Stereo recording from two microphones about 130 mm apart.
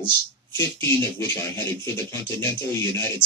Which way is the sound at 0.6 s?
20° left (ahead or behind).